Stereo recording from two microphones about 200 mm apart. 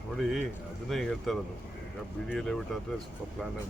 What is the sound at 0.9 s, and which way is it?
Speech, centre (ahead or behind).